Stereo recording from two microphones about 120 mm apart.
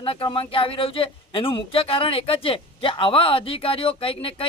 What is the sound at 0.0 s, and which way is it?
Speech, 45° left (ahead or behind).